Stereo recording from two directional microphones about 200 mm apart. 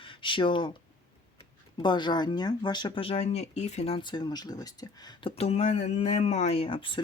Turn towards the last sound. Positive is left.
turn(degrees=25)  # may be behind; listen again after turning